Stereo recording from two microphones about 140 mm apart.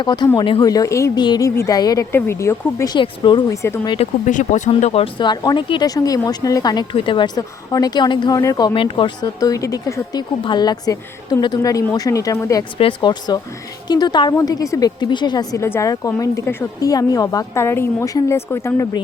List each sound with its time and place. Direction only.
0.0 s speech: 35° left (ahead or behind)
3.5 s speech: 20° left (ahead or behind)
3.8 s speech: 45° left (ahead or behind)
4.3 s speech: 60° left (ahead or behind)
4.8 s speech: 50° left (ahead or behind)
5.1 s speech: 30° left (ahead or behind)
12.8 s speech: 35° left (ahead or behind)